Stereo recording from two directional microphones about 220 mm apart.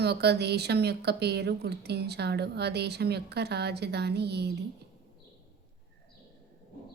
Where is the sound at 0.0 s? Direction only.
50° right (ahead or behind).